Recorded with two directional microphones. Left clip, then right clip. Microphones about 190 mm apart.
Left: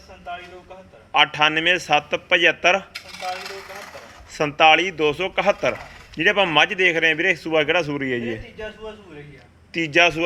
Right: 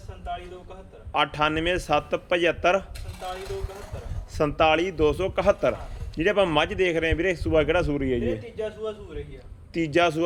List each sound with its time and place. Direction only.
1.1 s a man's voice: 10° right (ahead or behind)
2.9 s coin: 30° right (ahead or behind)
4.4 s a man's voice: 10° right (ahead or behind)
9.7 s a man's voice: 10° right (ahead or behind)